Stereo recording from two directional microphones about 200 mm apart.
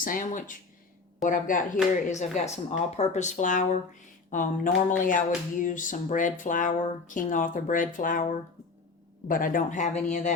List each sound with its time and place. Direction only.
0.0 s speech: 40° left (ahead or behind)